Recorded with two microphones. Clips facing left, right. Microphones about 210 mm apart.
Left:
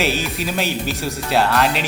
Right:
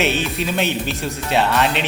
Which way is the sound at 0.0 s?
Centre (ahead or behind).